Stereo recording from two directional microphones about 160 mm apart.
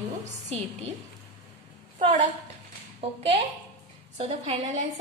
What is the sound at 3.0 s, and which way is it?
Speech, 40° right (ahead or behind).